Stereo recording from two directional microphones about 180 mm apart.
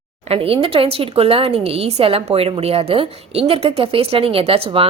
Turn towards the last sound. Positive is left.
turn(degrees=-30)  # may be behind; listen again after turning